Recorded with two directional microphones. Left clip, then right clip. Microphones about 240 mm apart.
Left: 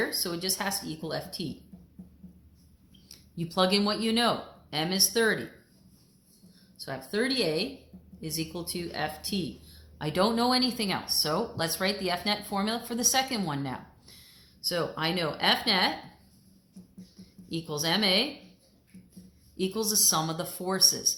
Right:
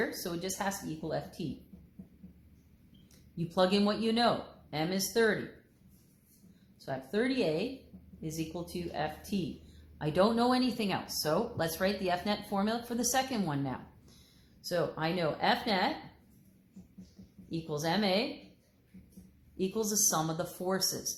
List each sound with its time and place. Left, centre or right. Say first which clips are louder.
0.2 s speech: left 5 dB; left
3.3 s speech: left 3 dB; left
6.8 s speech: left 3 dB; left
10.0 s speech: left 2 dB; centre
17.5 s speech: left 4 dB; left
19.5 s speech: left 4 dB; left